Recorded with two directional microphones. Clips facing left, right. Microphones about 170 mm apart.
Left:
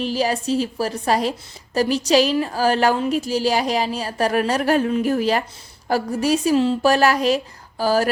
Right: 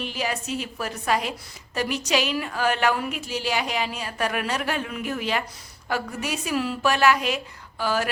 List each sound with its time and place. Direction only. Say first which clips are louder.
0.0 s speech: left 8 dB; 35° left (ahead or behind)